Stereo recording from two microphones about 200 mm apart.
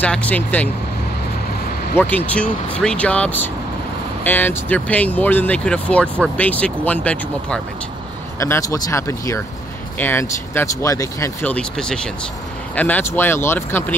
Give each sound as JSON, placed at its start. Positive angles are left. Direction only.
{"t": 0.0, "sound": "speech", "side_deg": 5}
{"t": 2.0, "sound": "speech", "side_deg": 10}
{"t": 8.4, "sound": "speech", "side_deg": 15}